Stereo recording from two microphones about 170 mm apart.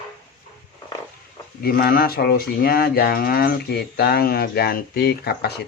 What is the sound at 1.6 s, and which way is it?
Speech, 60° left (ahead or behind).